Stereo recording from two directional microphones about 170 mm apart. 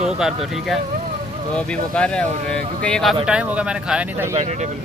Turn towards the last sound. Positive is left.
turn(degrees=-10)  # may be behind; listen again after turning